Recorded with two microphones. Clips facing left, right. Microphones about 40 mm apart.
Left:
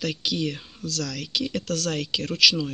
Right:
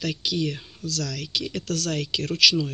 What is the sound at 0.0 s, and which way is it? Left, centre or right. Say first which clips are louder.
Speech: even; left.